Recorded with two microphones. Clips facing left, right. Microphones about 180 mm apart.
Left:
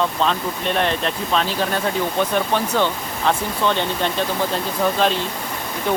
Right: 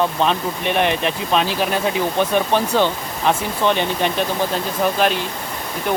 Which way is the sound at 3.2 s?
15° right (ahead or behind).